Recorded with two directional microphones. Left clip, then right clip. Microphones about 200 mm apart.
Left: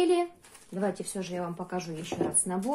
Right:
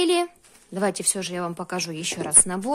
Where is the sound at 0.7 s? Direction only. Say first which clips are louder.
Right 7 dB; 60° right (ahead or behind).